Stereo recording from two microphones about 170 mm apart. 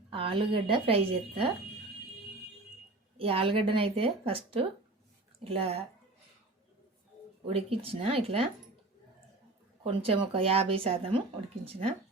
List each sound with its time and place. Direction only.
0.1 s a woman's voice: 30° right (ahead or behind)
3.2 s a woman's voice: 35° right (ahead or behind)
7.4 s a woman's voice: 35° right (ahead or behind)
9.8 s a woman's voice: 35° right (ahead or behind)